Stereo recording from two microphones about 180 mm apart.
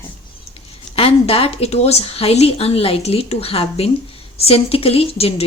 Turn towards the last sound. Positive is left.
turn(degrees=35)  # may be behind; listen again after turning